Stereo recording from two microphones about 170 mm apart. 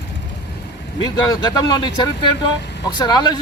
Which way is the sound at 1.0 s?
25° left (ahead or behind).